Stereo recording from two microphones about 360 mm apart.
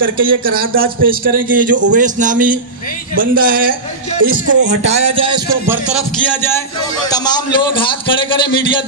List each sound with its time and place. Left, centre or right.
0.0 s a man's voice: right
6.2 s a man's voice: centre